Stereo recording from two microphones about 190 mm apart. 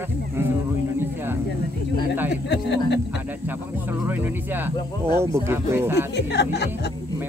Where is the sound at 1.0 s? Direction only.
10° right (ahead or behind).